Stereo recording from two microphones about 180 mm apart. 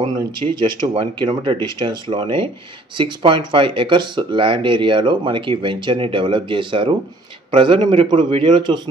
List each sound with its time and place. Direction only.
0.0 s speech: 25° right (ahead or behind)